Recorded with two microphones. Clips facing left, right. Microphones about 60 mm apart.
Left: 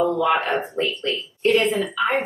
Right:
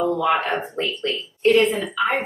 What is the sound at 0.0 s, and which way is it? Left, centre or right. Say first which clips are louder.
A woman's voice: left 1 dB; centre.